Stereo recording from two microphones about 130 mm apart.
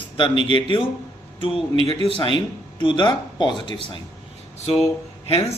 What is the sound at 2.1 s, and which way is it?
Speech, 35° left (ahead or behind).